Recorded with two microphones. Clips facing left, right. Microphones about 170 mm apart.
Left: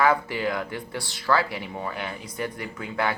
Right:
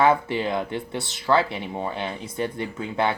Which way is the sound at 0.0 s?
25° right (ahead or behind).